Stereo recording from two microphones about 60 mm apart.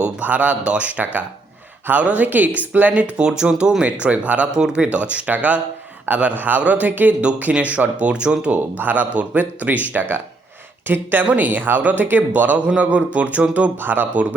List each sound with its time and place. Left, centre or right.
0.0 s a man's voice: right